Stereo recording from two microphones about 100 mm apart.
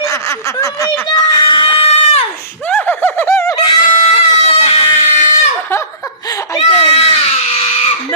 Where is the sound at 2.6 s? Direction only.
15° left (ahead or behind).